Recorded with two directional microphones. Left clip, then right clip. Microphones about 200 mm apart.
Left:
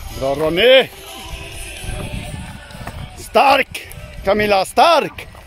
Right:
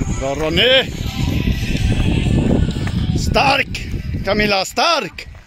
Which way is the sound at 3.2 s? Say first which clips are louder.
Left 3 dB; centre (ahead or behind).